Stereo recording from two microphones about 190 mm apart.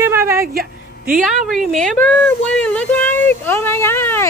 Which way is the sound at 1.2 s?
Centre (ahead or behind).